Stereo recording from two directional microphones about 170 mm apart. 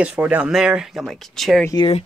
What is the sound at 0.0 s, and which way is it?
Speech, 10° right (ahead or behind).